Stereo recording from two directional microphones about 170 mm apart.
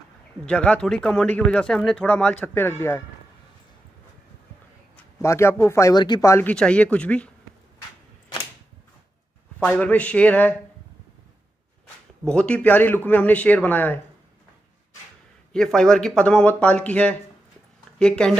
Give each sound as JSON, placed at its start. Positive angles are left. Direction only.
{"t": 0.5, "sound": "speech", "side_deg": 5}
{"t": 4.9, "sound": "speech", "side_deg": 15}
{"t": 9.7, "sound": "speech", "side_deg": 5}
{"t": 12.3, "sound": "speech", "side_deg": 5}
{"t": 15.5, "sound": "speech", "side_deg": 5}